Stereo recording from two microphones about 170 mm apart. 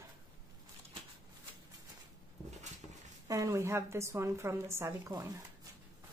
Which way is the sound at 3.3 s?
20° right (ahead or behind).